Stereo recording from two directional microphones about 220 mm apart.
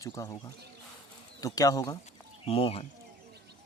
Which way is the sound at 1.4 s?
15° left (ahead or behind).